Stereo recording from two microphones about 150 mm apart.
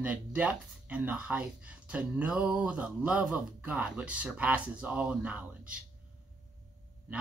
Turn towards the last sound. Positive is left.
turn(degrees=-10)  # may be behind; listen again after turning